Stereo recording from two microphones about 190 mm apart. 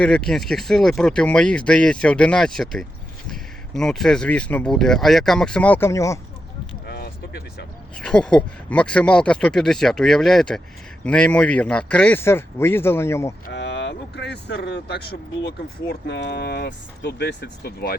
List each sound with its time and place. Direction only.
0.0 s speech: 5° left (ahead or behind)
6.8 s a sound: 60° left (ahead or behind)
7.9 s speech: 5° left (ahead or behind)
13.5 s speech: 70° left (ahead or behind)